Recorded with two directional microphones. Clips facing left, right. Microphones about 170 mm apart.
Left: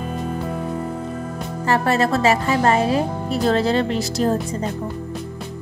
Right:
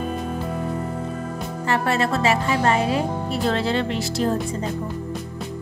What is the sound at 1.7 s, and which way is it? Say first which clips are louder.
Music: left 3 dB; 40° left (ahead or behind).